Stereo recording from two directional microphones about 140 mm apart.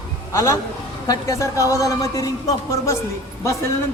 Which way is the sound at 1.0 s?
25° left (ahead or behind).